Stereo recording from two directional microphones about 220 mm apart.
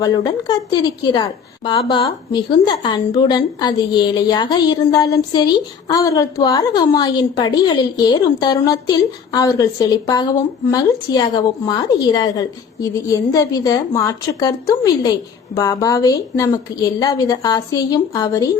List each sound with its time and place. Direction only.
0.0 s a woman's voice: 15° left (ahead or behind)